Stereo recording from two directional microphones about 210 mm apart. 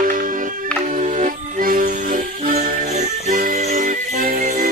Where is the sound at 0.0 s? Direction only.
40° right (ahead or behind).